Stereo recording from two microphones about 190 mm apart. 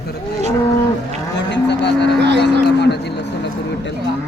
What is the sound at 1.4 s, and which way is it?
Livestock, 65° left (ahead or behind).